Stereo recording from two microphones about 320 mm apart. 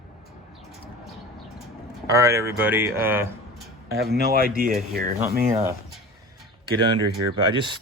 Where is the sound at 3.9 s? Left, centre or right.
Right.